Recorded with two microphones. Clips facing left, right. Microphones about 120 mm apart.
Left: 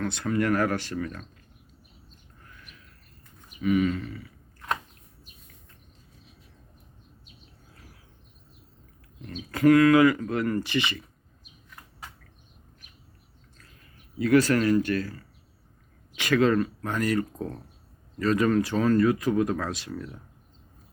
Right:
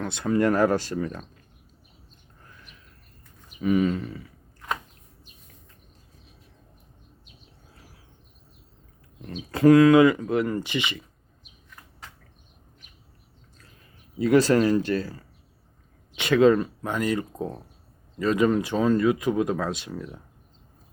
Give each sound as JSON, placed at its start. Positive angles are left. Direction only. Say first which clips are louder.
{"t": 0.0, "sound": "speech", "louder": "right 3 dB", "side_deg": -20}
{"t": 3.6, "sound": "speech", "louder": "right 1 dB", "side_deg": -30}
{"t": 9.3, "sound": "speech", "louder": "right 3 dB", "side_deg": -25}
{"t": 14.2, "sound": "speech", "louder": "right 2 dB", "side_deg": -25}